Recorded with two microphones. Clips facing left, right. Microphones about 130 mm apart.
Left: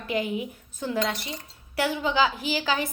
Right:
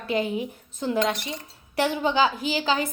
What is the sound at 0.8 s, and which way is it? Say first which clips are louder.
A woman's voice: right 3 dB; 20° right (ahead or behind).